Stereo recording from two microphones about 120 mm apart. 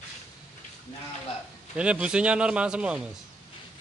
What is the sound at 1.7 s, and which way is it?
Speech, 10° right (ahead or behind).